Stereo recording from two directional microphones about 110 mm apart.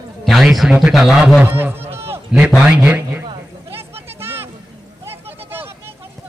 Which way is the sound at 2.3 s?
5° right (ahead or behind).